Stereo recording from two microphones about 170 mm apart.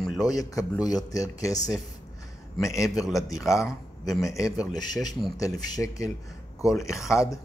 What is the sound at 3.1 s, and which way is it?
Speech, 20° left (ahead or behind).